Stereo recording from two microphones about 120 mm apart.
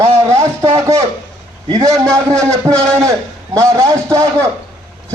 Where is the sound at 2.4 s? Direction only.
25° right (ahead or behind).